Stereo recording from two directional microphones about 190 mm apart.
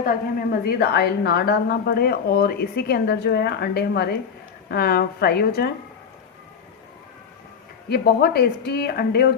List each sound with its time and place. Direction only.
0.6 s a woman's voice: 55° left (ahead or behind)
7.9 s a woman's voice: 55° left (ahead or behind)